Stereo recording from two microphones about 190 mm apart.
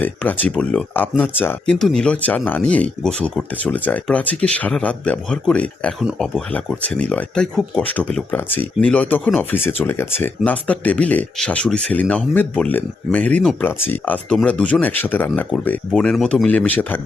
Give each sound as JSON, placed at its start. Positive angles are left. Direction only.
{"t": 0.0, "sound": "speech", "side_deg": 10}